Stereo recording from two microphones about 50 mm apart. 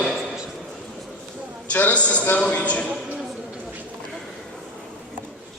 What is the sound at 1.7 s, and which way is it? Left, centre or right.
Speech, left.